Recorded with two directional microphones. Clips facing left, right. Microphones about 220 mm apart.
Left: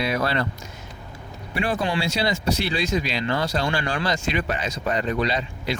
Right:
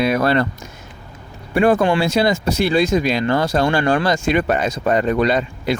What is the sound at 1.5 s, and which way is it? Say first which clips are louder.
Speech: right 10 dB; 50° right (ahead or behind).